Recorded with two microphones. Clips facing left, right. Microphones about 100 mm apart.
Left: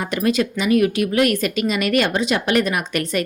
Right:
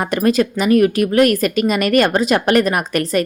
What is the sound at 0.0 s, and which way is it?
A woman's voice, 45° right (ahead or behind).